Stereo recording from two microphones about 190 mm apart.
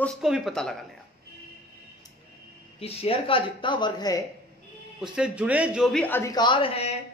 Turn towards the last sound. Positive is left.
turn(degrees=30)  # may be behind; listen again after turning